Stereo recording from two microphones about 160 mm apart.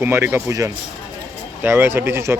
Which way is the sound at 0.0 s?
15° right (ahead or behind).